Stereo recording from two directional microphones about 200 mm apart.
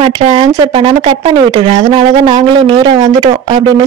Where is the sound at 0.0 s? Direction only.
30° right (ahead or behind).